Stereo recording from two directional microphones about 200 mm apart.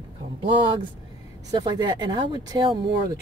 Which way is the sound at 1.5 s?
20° right (ahead or behind).